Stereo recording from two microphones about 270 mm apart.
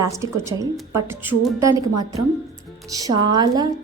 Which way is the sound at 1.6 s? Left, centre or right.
Centre.